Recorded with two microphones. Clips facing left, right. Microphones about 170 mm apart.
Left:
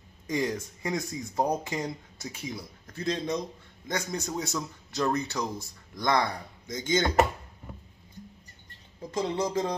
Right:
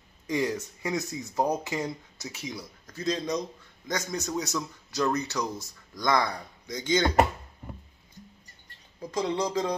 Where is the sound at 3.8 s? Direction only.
25° left (ahead or behind).